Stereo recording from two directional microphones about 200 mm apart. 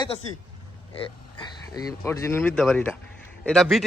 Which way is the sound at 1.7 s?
15° left (ahead or behind).